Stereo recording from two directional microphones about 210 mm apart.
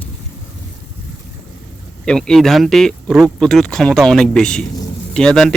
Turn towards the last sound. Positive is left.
turn(degrees=5)  # may be behind; listen again after turning